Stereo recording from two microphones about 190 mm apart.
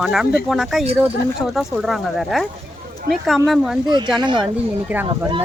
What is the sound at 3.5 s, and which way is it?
Speech, centre (ahead or behind).